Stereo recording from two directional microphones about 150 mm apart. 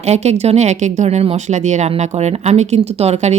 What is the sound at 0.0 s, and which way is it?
Speech, 45° right (ahead or behind).